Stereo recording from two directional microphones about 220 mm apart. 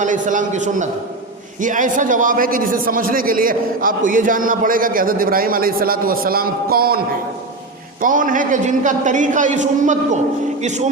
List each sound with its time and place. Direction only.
0.0 s a man's voice: 35° right (ahead or behind)
8.0 s a man's voice: 35° right (ahead or behind)